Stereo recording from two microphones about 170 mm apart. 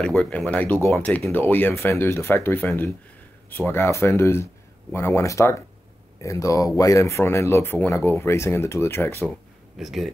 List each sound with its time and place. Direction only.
0.0 s speech: 5° left (ahead or behind)
9.8 s speech: centre (ahead or behind)